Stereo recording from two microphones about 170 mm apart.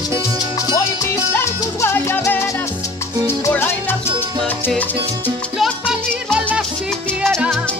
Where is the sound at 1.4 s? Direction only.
15° left (ahead or behind).